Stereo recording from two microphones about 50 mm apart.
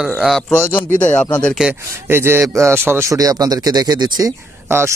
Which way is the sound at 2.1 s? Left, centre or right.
Right.